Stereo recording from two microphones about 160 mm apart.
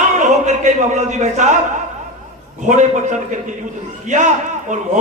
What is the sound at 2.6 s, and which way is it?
Speech, 50° right (ahead or behind).